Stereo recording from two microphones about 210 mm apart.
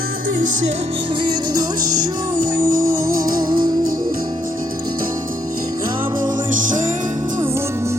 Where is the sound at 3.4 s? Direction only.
20° right (ahead or behind).